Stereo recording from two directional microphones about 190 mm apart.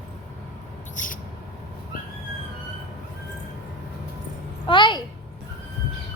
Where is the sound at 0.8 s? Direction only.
45° left (ahead or behind).